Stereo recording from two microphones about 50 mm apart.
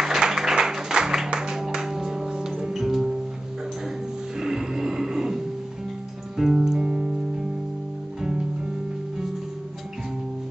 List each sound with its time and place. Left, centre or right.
0.0 s music: centre
4.4 s music: centre
8.2 s music: centre